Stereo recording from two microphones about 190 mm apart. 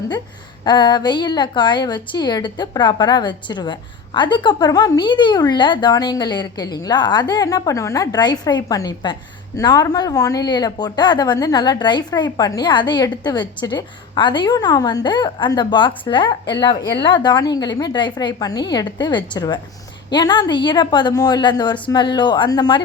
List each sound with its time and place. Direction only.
0.6 s a woman's voice: 25° left (ahead or behind)